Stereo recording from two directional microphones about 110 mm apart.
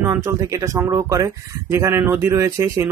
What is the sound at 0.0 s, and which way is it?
A man's voice, 25° right (ahead or behind).